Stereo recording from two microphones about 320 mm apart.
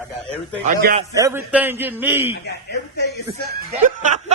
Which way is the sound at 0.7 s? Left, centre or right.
Right.